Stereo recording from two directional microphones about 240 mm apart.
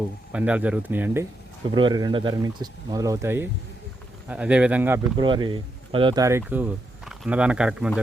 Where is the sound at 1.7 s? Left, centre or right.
Centre.